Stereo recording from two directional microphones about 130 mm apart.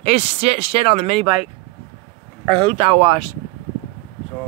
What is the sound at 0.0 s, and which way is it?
Speech, 55° right (ahead or behind).